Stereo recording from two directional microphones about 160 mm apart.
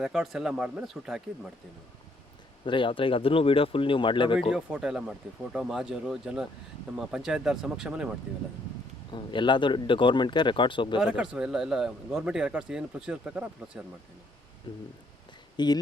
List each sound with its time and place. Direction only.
0.0 s speech: 5° right (ahead or behind)
2.6 s speech: 30° left (ahead or behind)
4.4 s speech: 5° right (ahead or behind)
9.0 s speech: 30° left (ahead or behind)
11.0 s speech: 5° right (ahead or behind)
14.7 s speech: 30° left (ahead or behind)